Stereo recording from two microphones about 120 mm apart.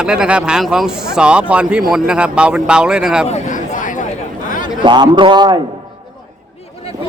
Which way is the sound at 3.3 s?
90° left.